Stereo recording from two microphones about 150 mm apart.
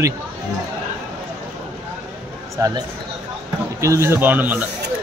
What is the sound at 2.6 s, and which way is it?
Speech, 20° right (ahead or behind).